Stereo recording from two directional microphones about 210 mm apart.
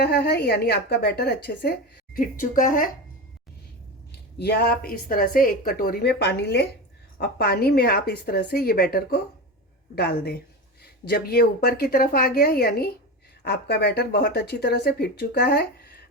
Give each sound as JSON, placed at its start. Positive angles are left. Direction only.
{"t": 0.0, "sound": "a woman's voice", "side_deg": 50}
{"t": 4.4, "sound": "speech", "side_deg": 50}